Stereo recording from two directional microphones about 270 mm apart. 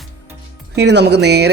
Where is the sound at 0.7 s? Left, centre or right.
Right.